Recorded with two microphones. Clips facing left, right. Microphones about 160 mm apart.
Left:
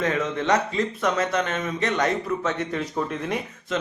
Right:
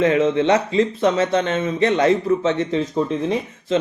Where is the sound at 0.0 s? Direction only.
30° right (ahead or behind).